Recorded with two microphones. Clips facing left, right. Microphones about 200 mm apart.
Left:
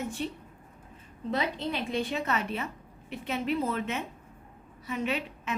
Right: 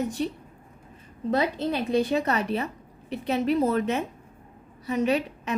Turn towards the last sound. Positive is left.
turn(degrees=-40)  # may be behind; listen again after turning